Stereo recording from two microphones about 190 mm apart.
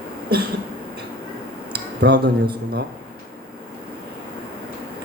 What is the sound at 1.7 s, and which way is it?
Speech, 60° right (ahead or behind).